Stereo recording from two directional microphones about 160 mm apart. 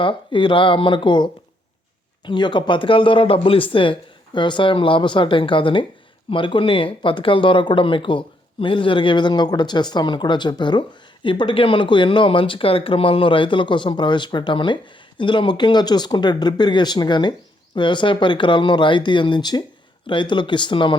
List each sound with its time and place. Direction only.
0.0 s speech: 30° left (ahead or behind)